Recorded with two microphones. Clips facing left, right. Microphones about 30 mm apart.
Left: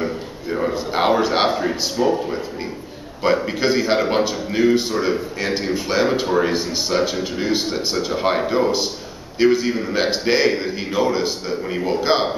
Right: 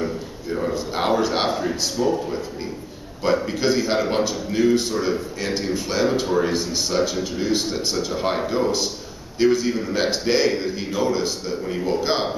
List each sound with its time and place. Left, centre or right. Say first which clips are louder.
0.0 s a man's voice: left 2 dB; left